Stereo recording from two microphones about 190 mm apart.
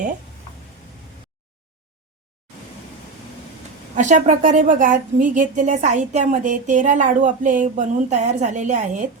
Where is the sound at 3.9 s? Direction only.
40° right (ahead or behind).